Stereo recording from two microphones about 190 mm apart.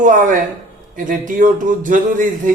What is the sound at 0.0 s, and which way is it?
A man's voice, 45° right (ahead or behind).